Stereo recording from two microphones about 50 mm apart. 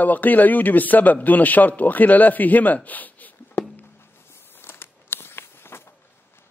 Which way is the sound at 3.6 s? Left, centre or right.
Left.